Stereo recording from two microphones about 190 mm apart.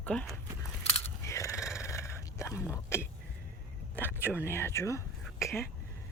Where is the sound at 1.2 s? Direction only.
15° left (ahead or behind).